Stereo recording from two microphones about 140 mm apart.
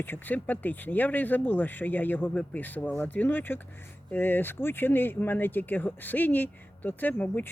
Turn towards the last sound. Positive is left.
turn(degrees=10)  # may be behind; listen again after turning